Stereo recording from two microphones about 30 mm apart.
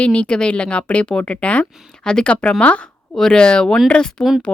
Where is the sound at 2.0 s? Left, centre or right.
Left.